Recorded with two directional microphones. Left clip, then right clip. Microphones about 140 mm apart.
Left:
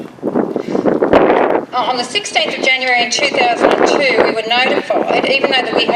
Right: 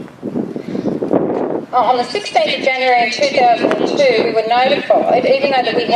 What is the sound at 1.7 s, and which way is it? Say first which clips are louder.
Speech: right 2 dB; 40° left (ahead or behind).